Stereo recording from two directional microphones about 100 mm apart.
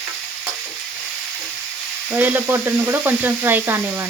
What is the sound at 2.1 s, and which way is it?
Speech, 20° right (ahead or behind).